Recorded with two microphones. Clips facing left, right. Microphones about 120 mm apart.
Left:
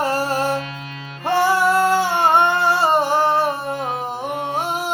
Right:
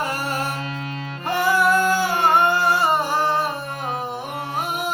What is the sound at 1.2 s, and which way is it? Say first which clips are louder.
Singing: left 3 dB; 30° left (ahead or behind).